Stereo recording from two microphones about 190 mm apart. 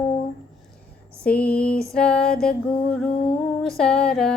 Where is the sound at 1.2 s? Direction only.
5° left (ahead or behind).